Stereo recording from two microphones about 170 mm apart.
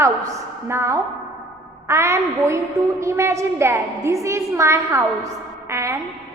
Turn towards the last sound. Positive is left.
turn(degrees=-15)  # may be behind; listen again after turning